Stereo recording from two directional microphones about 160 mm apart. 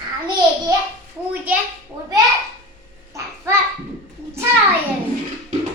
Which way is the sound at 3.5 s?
15° right (ahead or behind).